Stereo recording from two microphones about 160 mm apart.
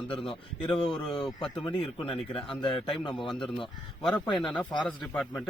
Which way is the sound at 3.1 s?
Centre (ahead or behind).